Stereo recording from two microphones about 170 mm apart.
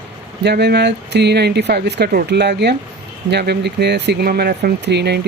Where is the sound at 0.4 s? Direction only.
80° right.